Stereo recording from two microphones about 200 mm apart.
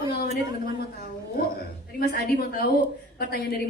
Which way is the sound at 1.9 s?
50° left (ahead or behind).